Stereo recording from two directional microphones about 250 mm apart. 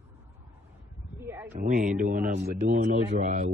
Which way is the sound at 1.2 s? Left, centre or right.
Centre.